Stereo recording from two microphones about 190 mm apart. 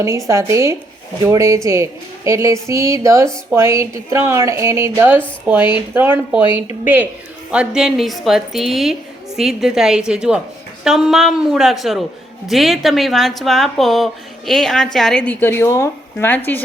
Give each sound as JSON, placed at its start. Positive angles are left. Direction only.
{"t": 0.3, "sound": "a woman's voice", "side_deg": -15}